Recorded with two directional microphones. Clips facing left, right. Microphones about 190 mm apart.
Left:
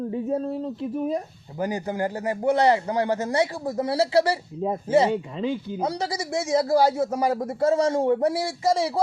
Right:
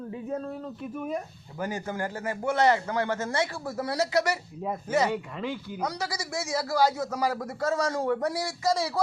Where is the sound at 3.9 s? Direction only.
30° left (ahead or behind).